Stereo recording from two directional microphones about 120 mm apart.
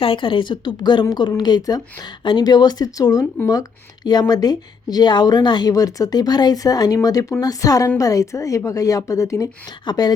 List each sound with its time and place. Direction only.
0.0 s a woman's voice: 45° left (ahead or behind)